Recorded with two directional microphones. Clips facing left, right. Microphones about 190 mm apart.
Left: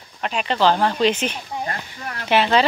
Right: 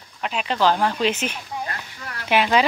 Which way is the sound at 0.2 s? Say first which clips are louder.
Left 2 dB; centre (ahead or behind).